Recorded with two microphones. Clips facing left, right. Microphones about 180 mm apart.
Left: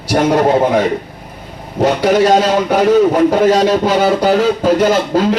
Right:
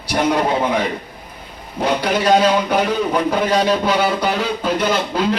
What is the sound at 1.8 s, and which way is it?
A man's voice, 45° left (ahead or behind).